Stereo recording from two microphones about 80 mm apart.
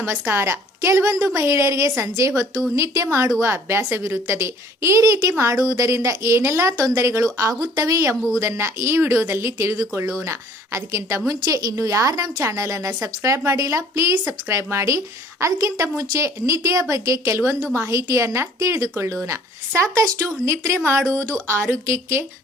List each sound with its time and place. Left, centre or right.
0.0 s a woman's voice: right